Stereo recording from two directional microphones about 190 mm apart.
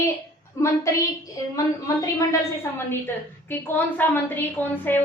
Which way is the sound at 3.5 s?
10° left (ahead or behind).